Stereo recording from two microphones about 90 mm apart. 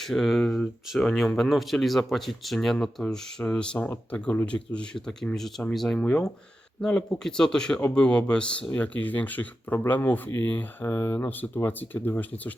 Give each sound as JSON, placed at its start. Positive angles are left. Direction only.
{"t": 0.0, "sound": "speech", "side_deg": 5}